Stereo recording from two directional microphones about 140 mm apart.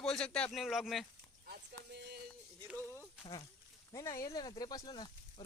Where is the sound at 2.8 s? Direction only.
20° left (ahead or behind).